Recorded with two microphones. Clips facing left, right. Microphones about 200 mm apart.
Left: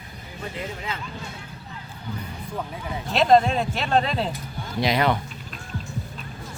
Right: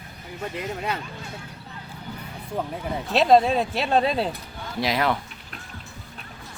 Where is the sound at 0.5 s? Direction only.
65° right (ahead or behind).